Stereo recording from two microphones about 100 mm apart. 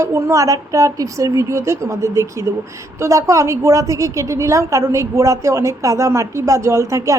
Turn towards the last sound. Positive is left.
turn(degrees=-30)  # may be behind; listen again after turning